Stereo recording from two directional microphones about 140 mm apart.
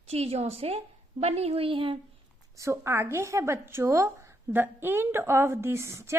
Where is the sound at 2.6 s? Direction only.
20° right (ahead or behind).